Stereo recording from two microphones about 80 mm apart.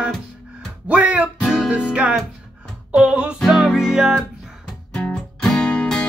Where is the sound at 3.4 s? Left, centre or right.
Centre.